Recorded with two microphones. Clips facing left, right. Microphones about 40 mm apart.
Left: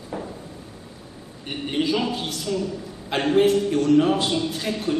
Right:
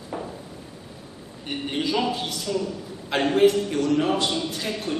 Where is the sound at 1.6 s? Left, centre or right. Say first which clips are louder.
Left 2 dB; centre.